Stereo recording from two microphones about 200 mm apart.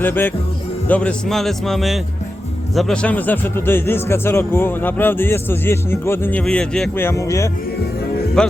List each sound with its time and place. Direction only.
0.0 s a man's voice: 10° left (ahead or behind)
8.4 s a man's voice: 5° left (ahead or behind)